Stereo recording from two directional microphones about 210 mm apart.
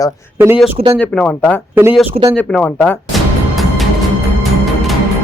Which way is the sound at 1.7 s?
10° right (ahead or behind).